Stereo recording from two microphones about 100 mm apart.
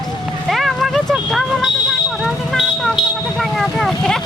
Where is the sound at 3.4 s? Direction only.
Centre (ahead or behind).